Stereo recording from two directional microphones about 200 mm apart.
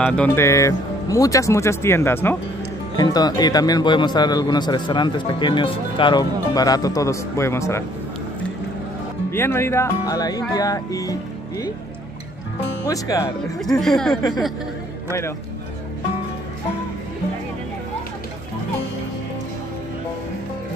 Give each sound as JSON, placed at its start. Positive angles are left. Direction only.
{"t": 0.0, "sound": "speech", "side_deg": 5}
{"t": 9.3, "sound": "speech", "side_deg": 10}
{"t": 12.8, "sound": "speech", "side_deg": 15}
{"t": 13.7, "sound": "speech", "side_deg": 0}